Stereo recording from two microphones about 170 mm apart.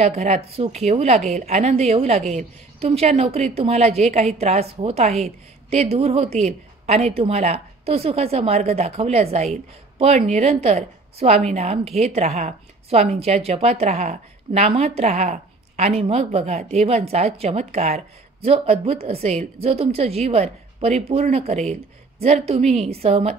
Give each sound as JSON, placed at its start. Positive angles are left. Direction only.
{"t": 0.0, "sound": "a woman's voice", "side_deg": -40}